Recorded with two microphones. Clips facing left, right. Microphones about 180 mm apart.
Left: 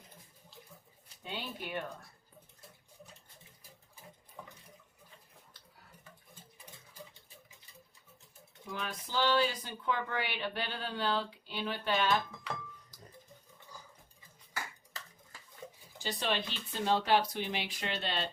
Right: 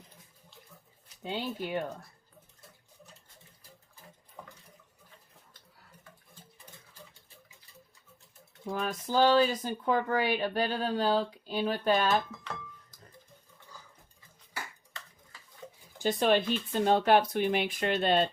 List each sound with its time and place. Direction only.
1.2 s speech: 25° right (ahead or behind)
4.4 s water: 10° right (ahead or behind)
8.6 s speech: 45° right (ahead or behind)
16.0 s speech: 50° right (ahead or behind)